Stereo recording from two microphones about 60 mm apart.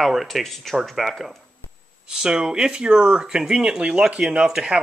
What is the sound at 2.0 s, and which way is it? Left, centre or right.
Speech, centre.